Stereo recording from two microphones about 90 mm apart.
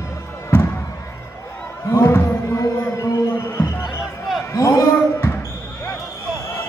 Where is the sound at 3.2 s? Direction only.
25° left (ahead or behind).